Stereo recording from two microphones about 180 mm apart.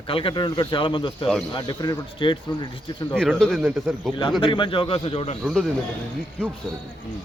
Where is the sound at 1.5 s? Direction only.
25° left (ahead or behind).